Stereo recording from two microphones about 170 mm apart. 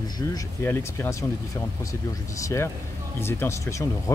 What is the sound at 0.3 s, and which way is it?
Speech, 15° left (ahead or behind).